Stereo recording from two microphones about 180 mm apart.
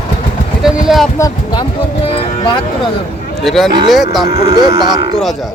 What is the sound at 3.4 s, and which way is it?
Speech, centre (ahead or behind).